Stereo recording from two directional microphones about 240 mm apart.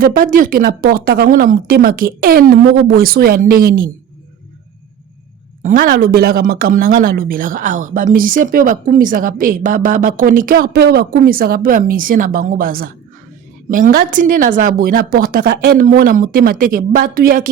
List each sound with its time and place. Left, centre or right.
0.0 s speech: right
5.6 s speech: right